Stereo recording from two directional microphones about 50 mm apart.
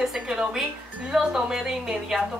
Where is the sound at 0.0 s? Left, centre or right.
Centre.